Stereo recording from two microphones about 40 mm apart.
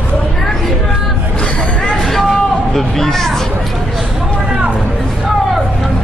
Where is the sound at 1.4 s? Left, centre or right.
Left.